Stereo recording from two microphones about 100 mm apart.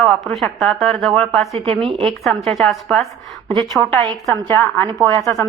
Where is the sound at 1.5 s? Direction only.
65° right (ahead or behind).